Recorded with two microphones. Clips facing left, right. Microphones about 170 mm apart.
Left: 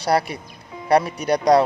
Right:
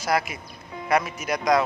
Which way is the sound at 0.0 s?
35° left (ahead or behind).